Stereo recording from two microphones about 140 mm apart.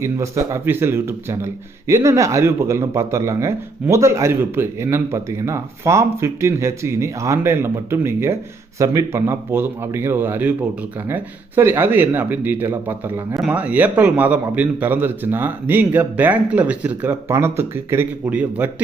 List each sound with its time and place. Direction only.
0.0 s a man's voice: 20° right (ahead or behind)